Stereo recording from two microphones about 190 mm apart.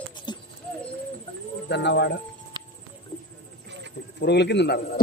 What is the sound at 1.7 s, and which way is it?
Speech, 65° left (ahead or behind).